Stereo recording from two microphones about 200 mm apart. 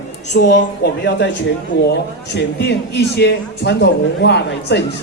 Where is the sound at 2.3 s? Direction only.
55° left (ahead or behind).